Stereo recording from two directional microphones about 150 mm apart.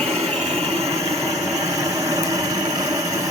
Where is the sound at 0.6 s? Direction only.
45° right (ahead or behind).